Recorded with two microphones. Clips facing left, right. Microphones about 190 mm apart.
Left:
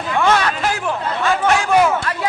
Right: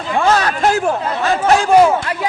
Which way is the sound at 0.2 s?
35° right (ahead or behind).